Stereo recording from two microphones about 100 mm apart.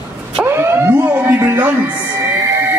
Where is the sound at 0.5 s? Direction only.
25° right (ahead or behind).